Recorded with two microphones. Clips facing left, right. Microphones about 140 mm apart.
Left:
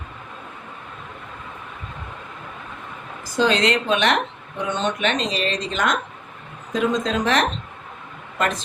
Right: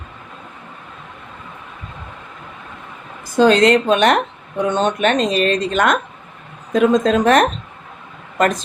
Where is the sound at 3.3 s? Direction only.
50° right (ahead or behind).